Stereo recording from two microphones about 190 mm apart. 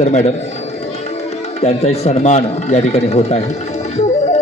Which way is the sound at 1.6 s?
35° left (ahead or behind).